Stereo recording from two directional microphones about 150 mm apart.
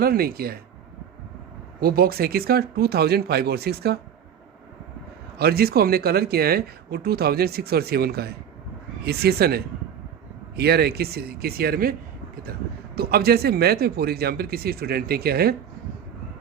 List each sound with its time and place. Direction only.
0.0 s speech: 90° right
1.8 s speech: 85° right
5.4 s speech: 90° right
13.0 s speech: 90° right